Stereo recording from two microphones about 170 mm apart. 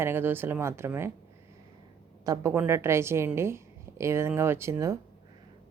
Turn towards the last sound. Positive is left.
turn(degrees=-15)  # may be behind; listen again after turning